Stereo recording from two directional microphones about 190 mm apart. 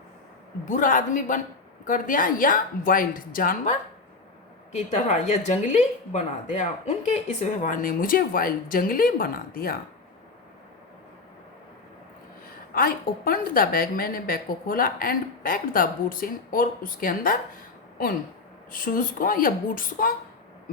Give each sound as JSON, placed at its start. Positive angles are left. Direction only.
{"t": 0.6, "sound": "a woman's voice", "side_deg": 45}
{"t": 12.7, "sound": "a woman's voice", "side_deg": 50}
{"t": 18.7, "sound": "a woman's voice", "side_deg": 45}